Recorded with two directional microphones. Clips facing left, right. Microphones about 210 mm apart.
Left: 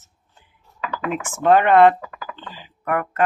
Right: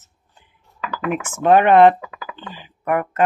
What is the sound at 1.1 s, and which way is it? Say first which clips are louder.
Speech: right 1 dB; 15° right (ahead or behind).